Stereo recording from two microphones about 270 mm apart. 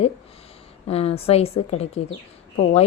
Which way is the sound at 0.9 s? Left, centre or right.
Left.